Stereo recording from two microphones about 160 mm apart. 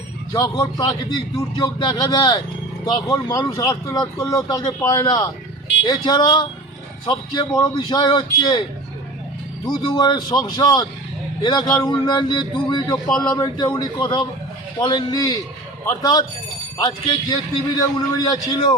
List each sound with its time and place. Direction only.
0.3 s speech: 20° left (ahead or behind)
9.6 s speech: 25° left (ahead or behind)